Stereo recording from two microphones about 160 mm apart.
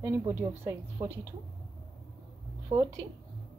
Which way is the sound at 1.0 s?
35° right (ahead or behind).